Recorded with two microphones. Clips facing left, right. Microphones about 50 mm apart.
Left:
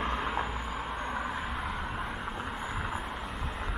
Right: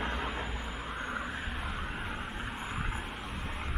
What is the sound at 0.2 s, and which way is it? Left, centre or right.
Vehicle, centre.